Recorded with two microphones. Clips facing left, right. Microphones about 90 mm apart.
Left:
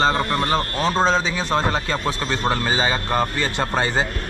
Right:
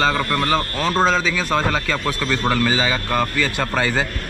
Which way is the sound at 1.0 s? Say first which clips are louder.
Right 3 dB; 30° left (ahead or behind).